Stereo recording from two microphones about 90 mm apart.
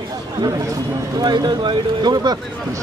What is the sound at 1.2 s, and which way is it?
Speech, 50° right (ahead or behind).